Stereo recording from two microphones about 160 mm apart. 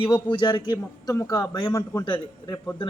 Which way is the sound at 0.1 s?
30° left (ahead or behind).